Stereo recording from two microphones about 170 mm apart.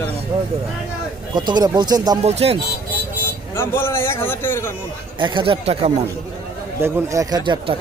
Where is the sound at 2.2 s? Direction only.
35° right (ahead or behind).